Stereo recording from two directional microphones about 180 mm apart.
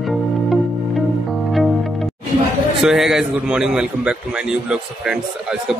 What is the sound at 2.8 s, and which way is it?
A man's voice, centre (ahead or behind).